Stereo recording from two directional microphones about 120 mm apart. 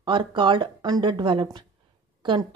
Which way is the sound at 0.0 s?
40° right (ahead or behind).